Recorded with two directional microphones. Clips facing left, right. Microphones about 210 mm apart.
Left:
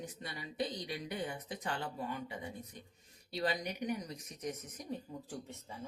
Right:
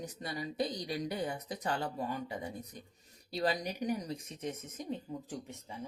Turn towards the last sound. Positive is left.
turn(degrees=-15)  # may be behind; listen again after turning